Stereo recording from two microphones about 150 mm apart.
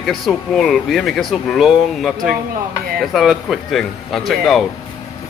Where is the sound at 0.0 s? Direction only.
Centre (ahead or behind).